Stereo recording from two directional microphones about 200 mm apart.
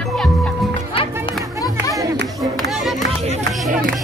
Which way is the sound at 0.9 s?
25° left (ahead or behind).